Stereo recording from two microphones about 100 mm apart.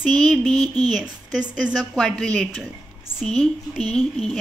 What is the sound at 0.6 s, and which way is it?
Speech, 45° right (ahead or behind).